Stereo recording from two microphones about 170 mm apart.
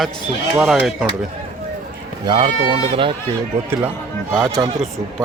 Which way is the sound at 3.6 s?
15° right (ahead or behind).